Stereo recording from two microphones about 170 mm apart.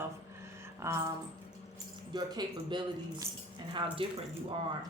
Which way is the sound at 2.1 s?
25° right (ahead or behind).